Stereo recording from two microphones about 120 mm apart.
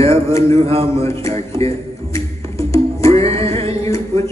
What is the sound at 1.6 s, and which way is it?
Music, 25° left (ahead or behind).